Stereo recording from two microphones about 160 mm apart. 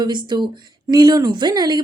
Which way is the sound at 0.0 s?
30° right (ahead or behind).